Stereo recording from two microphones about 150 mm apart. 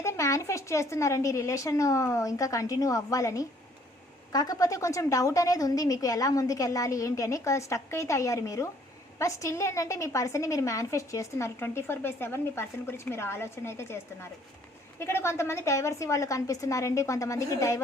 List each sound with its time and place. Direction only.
0.0 s a woman's voice: 20° left (ahead or behind)